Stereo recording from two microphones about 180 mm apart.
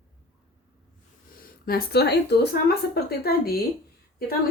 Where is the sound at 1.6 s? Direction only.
60° left (ahead or behind).